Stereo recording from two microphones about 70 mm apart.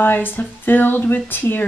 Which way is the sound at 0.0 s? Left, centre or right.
Left.